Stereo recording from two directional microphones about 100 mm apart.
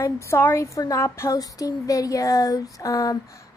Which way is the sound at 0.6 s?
35° left (ahead or behind).